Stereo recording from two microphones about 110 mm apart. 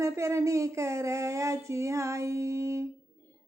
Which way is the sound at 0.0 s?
25° right (ahead or behind).